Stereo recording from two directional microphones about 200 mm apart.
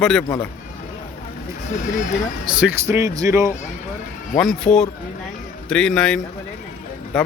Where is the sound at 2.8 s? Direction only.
15° right (ahead or behind).